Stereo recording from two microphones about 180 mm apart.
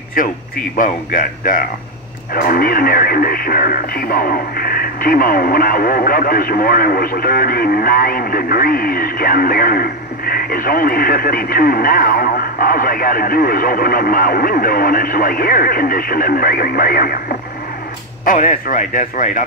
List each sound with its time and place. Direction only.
0.2 s speech: 50° left (ahead or behind)
18.2 s speech: 45° left (ahead or behind)